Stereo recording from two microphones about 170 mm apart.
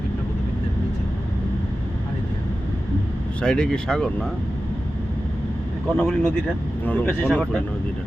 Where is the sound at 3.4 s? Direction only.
5° left (ahead or behind).